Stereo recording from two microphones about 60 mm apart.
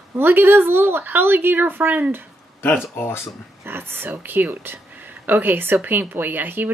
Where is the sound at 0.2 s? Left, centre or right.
Right.